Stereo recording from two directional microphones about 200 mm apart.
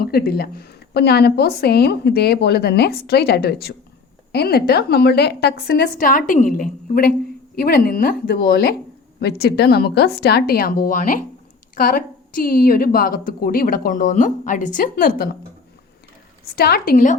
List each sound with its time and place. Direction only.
0.0 s a woman's voice: 50° left (ahead or behind)
16.6 s a woman's voice: 50° left (ahead or behind)